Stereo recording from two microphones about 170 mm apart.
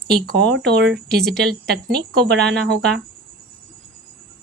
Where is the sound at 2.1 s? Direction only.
80° right.